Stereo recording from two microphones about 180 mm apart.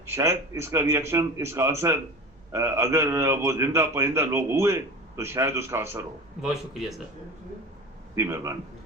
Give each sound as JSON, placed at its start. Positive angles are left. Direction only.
{"t": 0.0, "sound": "a man's voice", "side_deg": -15}
{"t": 6.4, "sound": "speech", "side_deg": 0}
{"t": 8.1, "sound": "a man's voice", "side_deg": -15}